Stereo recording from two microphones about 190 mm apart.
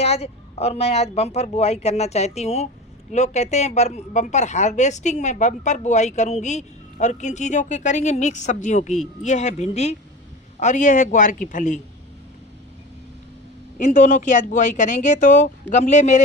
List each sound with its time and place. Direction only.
0.0 s speech: 35° left (ahead or behind)
13.7 s speech: 40° left (ahead or behind)